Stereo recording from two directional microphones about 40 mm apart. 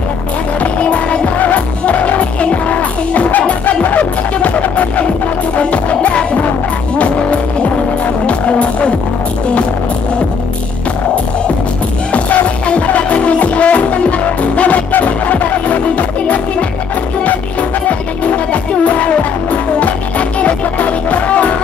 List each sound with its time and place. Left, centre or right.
0.6 s music: left
12.1 s music: left